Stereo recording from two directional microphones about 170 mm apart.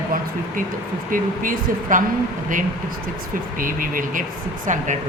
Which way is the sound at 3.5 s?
55° right (ahead or behind).